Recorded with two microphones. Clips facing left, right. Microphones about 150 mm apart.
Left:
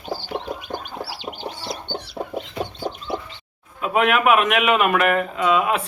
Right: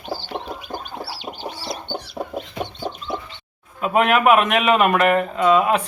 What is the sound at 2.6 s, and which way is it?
Chicken, 10° left (ahead or behind).